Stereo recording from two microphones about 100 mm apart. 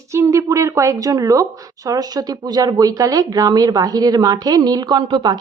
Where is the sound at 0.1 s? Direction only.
30° right (ahead or behind).